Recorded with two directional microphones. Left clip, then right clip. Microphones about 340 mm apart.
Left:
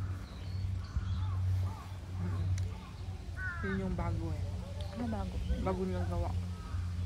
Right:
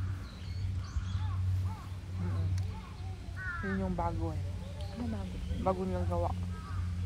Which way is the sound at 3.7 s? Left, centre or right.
Centre.